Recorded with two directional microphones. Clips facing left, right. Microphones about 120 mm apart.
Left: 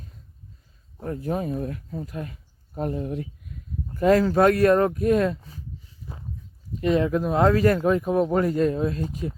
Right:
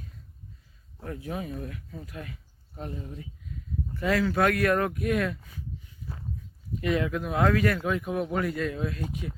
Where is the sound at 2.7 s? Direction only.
50° left (ahead or behind).